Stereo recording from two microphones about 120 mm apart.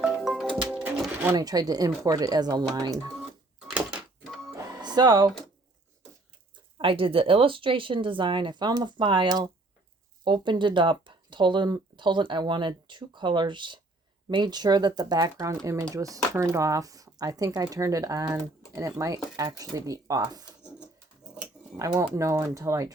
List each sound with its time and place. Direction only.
0.0 s music: centre (ahead or behind)
1.4 s speech: 30° right (ahead or behind)
4.5 s music: 30° right (ahead or behind)
6.7 s speech: 50° right (ahead or behind); by 20.5 s 30° right (ahead or behind)
22.1 s speech: 25° right (ahead or behind)